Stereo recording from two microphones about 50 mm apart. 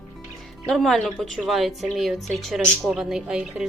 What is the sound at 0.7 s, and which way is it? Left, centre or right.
A woman's voice, centre.